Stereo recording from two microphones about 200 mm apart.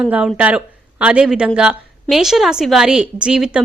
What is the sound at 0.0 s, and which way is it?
A woman's voice, 5° right (ahead or behind).